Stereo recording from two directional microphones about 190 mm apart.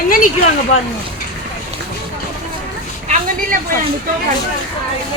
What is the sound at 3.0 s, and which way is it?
Speech, 40° right (ahead or behind).